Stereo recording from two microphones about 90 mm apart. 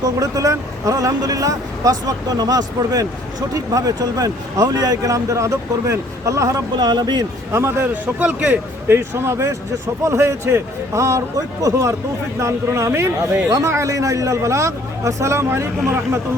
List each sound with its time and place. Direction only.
0.0 s speech: 40° right (ahead or behind)
6.7 s speech: 50° right (ahead or behind)
7.5 s a man's voice: 30° right (ahead or behind)
8.0 s a man's voice: 15° right (ahead or behind)